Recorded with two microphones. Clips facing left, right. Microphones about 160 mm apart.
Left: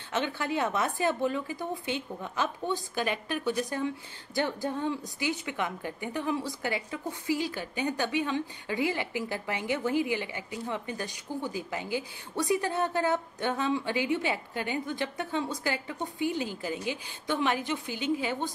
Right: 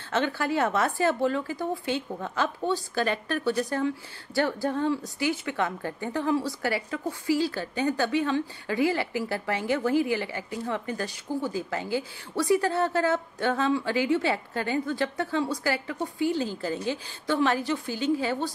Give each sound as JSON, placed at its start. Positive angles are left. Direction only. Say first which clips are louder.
{"t": 0.1, "sound": "a woman's voice", "louder": "right 4 dB", "side_deg": 20}